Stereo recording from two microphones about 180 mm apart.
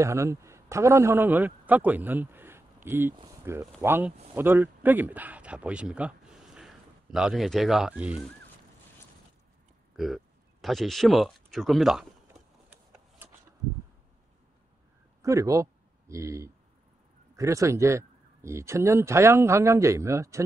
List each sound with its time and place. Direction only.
0.0 s a man's voice: 15° right (ahead or behind)
9.9 s speech: centre (ahead or behind)
13.2 s a sound: 10° right (ahead or behind)
15.2 s speech: 15° right (ahead or behind)